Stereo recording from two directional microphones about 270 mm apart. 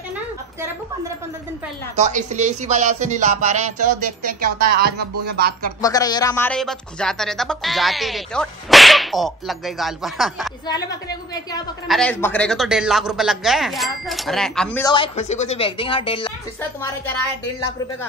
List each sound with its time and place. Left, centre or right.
2.0 s music: right
4.3 s speech: right
5.8 s speech: centre
11.9 s speech: centre
14.9 s a woman's voice: left